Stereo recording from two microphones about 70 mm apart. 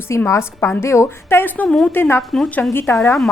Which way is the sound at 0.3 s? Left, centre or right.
Left.